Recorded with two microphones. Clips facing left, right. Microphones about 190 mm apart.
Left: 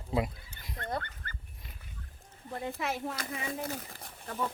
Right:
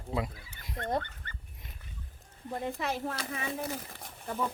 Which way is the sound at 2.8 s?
Centre (ahead or behind).